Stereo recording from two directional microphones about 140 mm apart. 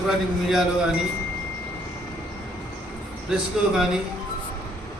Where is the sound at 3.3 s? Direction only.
5° right (ahead or behind).